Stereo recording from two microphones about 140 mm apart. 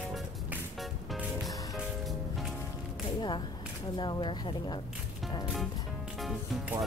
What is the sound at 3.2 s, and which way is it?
Speech, 35° left (ahead or behind).